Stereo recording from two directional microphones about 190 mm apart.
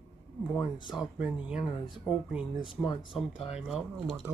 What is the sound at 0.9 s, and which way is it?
Speech, 5° right (ahead or behind).